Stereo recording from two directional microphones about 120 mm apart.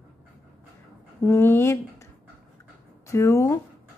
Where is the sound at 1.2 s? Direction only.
20° left (ahead or behind).